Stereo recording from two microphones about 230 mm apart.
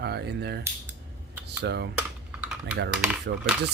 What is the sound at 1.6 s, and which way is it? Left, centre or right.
Speech, right.